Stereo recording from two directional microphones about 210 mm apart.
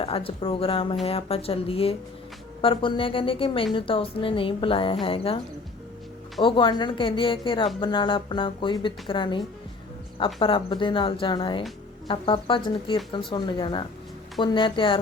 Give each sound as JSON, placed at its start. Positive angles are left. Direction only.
{"t": 0.0, "sound": "speech", "side_deg": 25}
{"t": 6.4, "sound": "speech", "side_deg": 20}
{"t": 10.4, "sound": "speech", "side_deg": 25}